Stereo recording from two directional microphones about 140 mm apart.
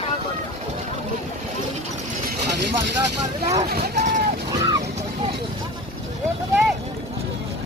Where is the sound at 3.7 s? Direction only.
65° right (ahead or behind).